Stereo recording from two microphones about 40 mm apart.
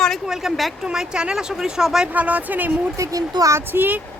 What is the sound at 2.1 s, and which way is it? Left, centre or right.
Speech, right.